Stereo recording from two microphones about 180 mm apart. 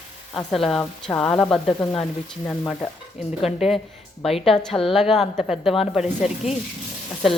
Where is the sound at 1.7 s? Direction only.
20° left (ahead or behind).